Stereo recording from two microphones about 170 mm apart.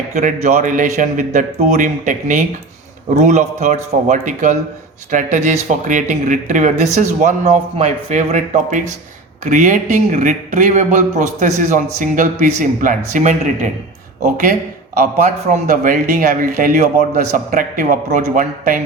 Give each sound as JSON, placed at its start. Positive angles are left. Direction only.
{"t": 0.1, "sound": "a man's voice", "side_deg": -45}
{"t": 14.9, "sound": "a man's voice", "side_deg": -55}